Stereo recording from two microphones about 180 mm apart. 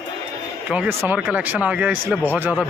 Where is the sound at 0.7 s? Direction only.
10° right (ahead or behind).